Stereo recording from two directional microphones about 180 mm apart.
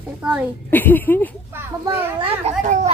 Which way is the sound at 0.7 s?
10° left (ahead or behind).